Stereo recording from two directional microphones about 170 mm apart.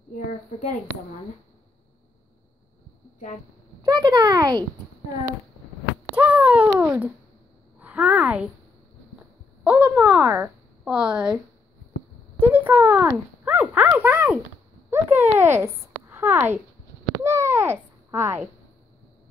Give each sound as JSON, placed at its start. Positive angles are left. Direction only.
{"t": 3.8, "sound": "a child's voice", "side_deg": -25}
{"t": 6.1, "sound": "a sound", "side_deg": -10}
{"t": 7.8, "sound": "speech", "side_deg": -10}
{"t": 9.6, "sound": "a woman's voice", "side_deg": -5}
{"t": 12.4, "sound": "speech", "side_deg": -10}
{"t": 17.2, "sound": "babbling", "side_deg": -15}